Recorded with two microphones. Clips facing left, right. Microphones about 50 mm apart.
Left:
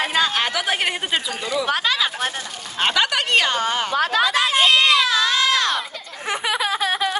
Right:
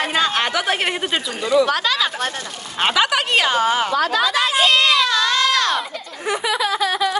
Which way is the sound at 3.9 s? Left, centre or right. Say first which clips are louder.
Right 1 dB; left.